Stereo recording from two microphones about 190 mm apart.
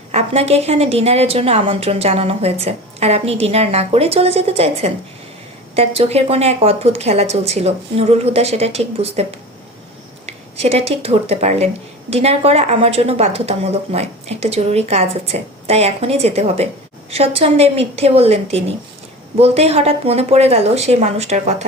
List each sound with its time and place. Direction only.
0.1 s a woman's voice: 35° right (ahead or behind)
10.2 s a woman's voice: 35° right (ahead or behind)